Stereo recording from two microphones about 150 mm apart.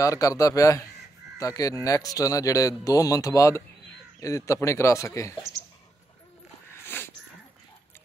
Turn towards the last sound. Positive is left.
turn(degrees=15)  # may be behind; listen again after turning